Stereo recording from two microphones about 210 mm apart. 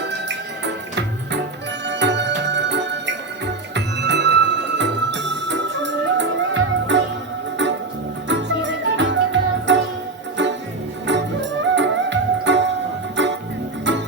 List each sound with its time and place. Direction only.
0.0 s music: 55° right (ahead or behind)